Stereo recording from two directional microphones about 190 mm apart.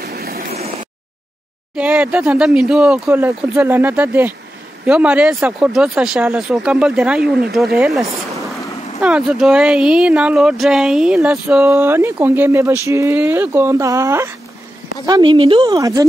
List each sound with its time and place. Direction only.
0.0 s a sound: 55° right (ahead or behind)
1.8 s speech: 5° right (ahead or behind)
9.0 s speech: 5° right (ahead or behind); by 16.1 s 20° right (ahead or behind)